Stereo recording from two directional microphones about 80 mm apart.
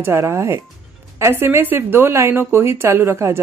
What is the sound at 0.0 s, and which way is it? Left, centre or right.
A woman's voice, right.